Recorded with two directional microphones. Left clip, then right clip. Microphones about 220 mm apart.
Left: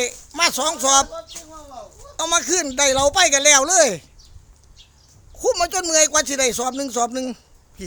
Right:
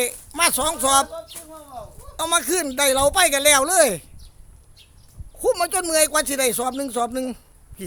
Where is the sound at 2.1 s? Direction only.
Centre (ahead or behind).